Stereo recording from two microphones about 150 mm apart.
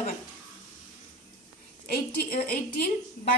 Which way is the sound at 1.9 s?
85° left.